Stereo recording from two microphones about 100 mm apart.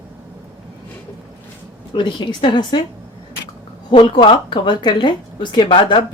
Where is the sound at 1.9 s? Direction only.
50° left (ahead or behind).